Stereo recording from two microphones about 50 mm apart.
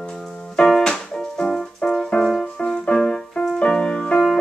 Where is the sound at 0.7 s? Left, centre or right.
Centre.